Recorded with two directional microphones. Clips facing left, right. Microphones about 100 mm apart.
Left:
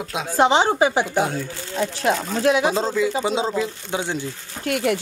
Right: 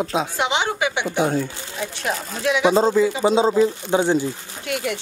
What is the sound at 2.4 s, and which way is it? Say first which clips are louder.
Speech: even; 35° left (ahead or behind).